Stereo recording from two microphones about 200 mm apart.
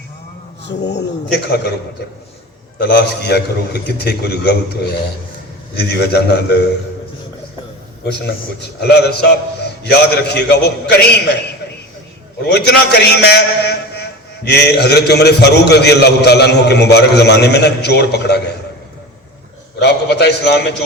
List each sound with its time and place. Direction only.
0.6 s a man's voice: 60° left (ahead or behind)
2.7 s a man's voice: 55° left (ahead or behind)
8.0 s a man's voice: 55° left (ahead or behind)
12.5 s a man's voice: 55° left (ahead or behind)
19.8 s a man's voice: 55° left (ahead or behind)